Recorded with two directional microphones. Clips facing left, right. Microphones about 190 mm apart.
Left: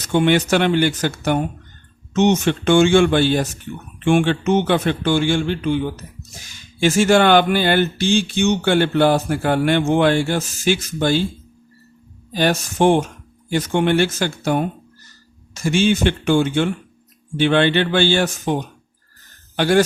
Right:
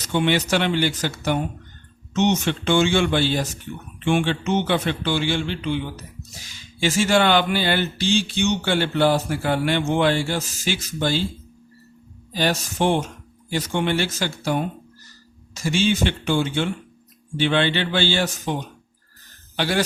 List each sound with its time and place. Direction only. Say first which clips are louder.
0.0 s speech: left 5 dB; 50° left (ahead or behind)
12.3 s speech: left 4 dB; 50° left (ahead or behind)